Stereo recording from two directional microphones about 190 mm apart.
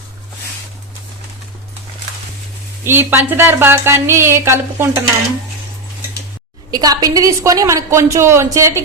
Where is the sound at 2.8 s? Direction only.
10° right (ahead or behind).